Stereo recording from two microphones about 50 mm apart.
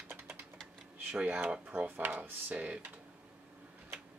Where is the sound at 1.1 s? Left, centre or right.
Right.